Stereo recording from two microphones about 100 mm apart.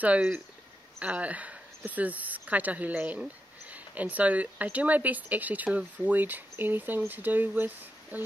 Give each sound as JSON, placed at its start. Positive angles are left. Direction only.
{"t": 0.0, "sound": "speech", "side_deg": -15}